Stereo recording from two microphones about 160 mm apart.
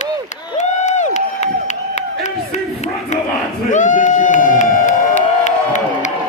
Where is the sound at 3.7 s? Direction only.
50° left (ahead or behind).